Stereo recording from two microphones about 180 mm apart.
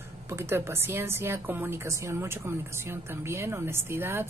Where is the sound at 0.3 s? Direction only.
15° right (ahead or behind).